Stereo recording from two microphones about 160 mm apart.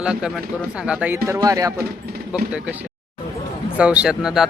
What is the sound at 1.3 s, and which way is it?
Speech, 20° right (ahead or behind).